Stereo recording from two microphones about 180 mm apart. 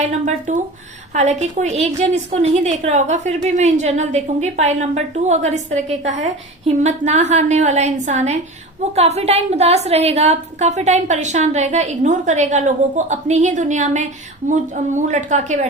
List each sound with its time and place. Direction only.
0.0 s a woman's voice: 45° right (ahead or behind)